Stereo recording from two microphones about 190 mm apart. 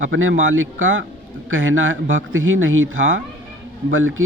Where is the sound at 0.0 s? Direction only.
90° right.